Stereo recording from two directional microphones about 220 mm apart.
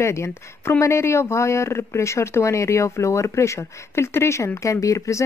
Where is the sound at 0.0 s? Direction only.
10° left (ahead or behind).